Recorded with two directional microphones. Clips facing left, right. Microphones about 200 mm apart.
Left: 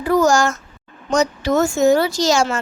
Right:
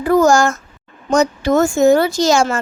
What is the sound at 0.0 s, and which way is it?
A child's voice, 50° right (ahead or behind).